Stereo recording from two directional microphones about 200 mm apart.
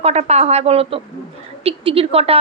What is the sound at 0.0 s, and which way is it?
A woman's voice, 35° right (ahead or behind).